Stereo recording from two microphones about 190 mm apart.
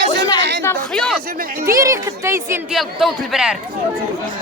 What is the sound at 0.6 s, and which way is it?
Speech, 10° left (ahead or behind).